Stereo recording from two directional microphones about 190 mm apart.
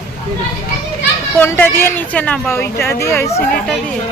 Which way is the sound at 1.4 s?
10° left (ahead or behind).